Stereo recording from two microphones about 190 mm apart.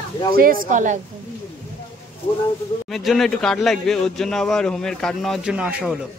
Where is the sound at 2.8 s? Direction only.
Centre (ahead or behind).